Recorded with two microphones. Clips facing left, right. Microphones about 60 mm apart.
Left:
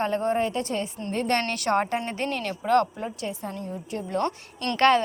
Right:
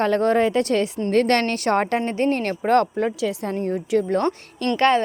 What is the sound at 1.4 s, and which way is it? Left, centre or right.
Speech, right.